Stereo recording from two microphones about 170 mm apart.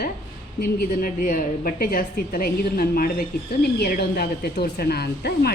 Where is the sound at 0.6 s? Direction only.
55° left (ahead or behind).